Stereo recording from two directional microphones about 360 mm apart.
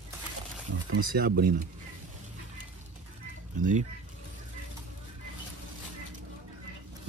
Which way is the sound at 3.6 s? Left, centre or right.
Right.